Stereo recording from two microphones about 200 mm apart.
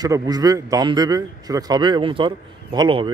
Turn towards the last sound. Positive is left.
turn(degrees=-25)  # may be behind; listen again after turning